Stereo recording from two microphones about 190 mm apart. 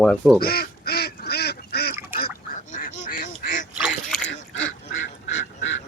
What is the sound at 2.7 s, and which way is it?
Duck, 45° left (ahead or behind).